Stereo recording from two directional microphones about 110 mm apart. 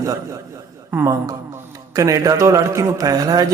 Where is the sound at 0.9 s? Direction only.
15° right (ahead or behind).